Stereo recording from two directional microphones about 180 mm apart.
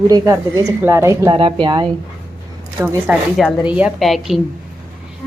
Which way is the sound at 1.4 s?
25° right (ahead or behind).